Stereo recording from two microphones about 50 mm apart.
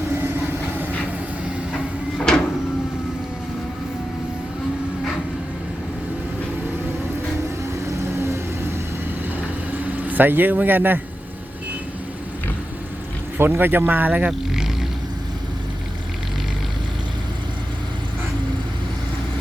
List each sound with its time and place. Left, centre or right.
2.3 s printer: centre
7.9 s vehicle: right
9.7 s speech: right
13.4 s speech: right
14.3 s vehicle: centre